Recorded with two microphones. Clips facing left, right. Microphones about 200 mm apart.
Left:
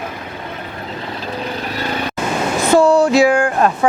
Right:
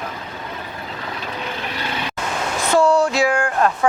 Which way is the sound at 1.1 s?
35° left (ahead or behind).